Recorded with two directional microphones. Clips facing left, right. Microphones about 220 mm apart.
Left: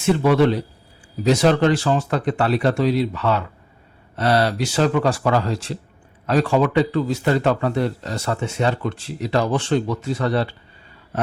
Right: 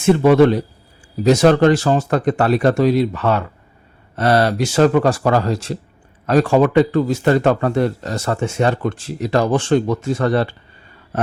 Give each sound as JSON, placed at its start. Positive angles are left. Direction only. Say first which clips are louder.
{"t": 0.0, "sound": "speech", "louder": "right 5 dB", "side_deg": -50}